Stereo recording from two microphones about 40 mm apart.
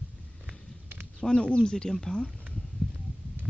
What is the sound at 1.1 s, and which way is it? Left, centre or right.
A woman's voice, left.